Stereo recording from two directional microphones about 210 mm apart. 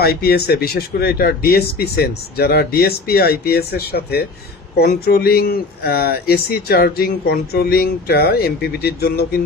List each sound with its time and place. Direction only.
0.0 s speech: 50° left (ahead or behind)